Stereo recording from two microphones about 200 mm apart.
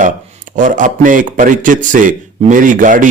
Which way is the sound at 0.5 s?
40° right (ahead or behind).